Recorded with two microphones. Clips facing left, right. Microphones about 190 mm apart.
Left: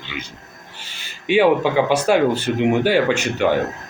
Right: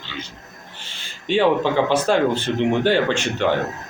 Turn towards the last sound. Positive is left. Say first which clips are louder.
# left 2 dB
turn(degrees=10)  # may be behind; listen again after turning